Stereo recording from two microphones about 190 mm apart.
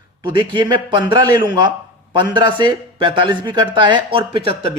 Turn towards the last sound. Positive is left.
turn(degrees=-30)  # may be behind; listen again after turning